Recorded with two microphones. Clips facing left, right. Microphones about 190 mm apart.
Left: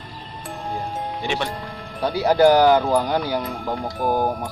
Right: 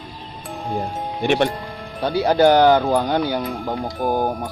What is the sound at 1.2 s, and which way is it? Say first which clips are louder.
Speech: right 9 dB; 60° right (ahead or behind).